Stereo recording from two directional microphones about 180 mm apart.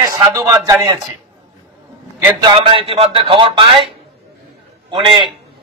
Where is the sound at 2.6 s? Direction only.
30° right (ahead or behind).